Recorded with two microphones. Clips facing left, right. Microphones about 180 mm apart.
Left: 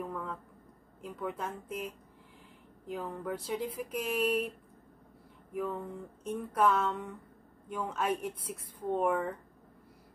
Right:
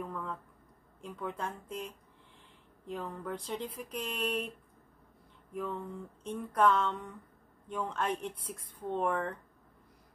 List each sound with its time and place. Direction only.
0.1 s a sound: 5° left (ahead or behind)
1.0 s speech: 5° left (ahead or behind)
5.5 s speech: 10° left (ahead or behind)